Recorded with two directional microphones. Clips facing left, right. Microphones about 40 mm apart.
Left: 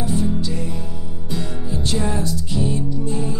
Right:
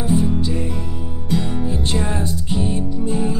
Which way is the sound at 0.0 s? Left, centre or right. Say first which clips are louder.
Right 3 dB; right.